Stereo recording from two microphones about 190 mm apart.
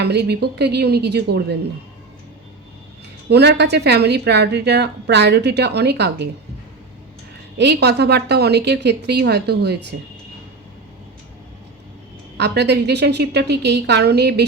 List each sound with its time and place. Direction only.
0.0 s a woman's voice: 60° right (ahead or behind)
3.2 s a woman's voice: 60° right (ahead or behind)
7.6 s a woman's voice: 60° right (ahead or behind)
12.4 s a woman's voice: 60° right (ahead or behind)